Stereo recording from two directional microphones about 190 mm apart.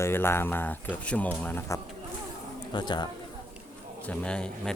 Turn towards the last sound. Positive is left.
turn(degrees=5)  # may be behind; listen again after turning